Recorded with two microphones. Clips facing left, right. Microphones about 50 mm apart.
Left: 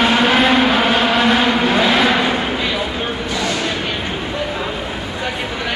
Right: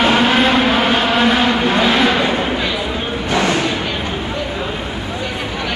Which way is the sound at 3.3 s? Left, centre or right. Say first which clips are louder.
Right 7 dB; right.